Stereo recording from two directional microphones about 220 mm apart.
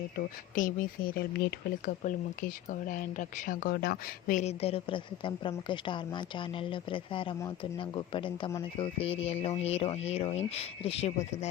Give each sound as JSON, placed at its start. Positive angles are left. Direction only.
{"t": 0.5, "sound": "speech", "side_deg": 40}